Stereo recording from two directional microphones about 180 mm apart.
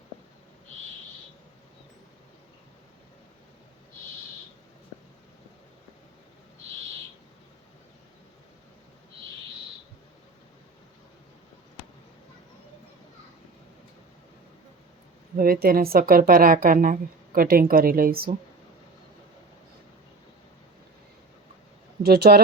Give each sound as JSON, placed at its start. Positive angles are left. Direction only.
{"t": 15.4, "sound": "speech", "side_deg": -55}
{"t": 22.0, "sound": "speech", "side_deg": -60}